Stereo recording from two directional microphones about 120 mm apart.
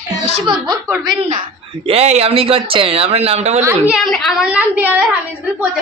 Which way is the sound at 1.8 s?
60° right (ahead or behind).